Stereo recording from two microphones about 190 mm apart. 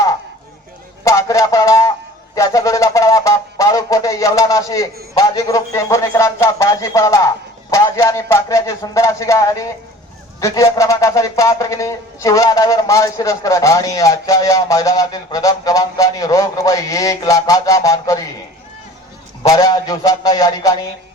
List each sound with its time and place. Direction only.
1.0 s a sound: 15° left (ahead or behind)
5.1 s speech: 20° left (ahead or behind)
19.4 s a man's voice: 20° left (ahead or behind)